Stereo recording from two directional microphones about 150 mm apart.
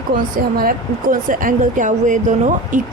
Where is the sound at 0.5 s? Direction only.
70° right (ahead or behind).